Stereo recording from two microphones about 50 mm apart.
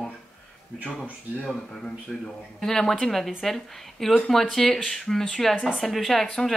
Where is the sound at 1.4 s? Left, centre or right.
Left.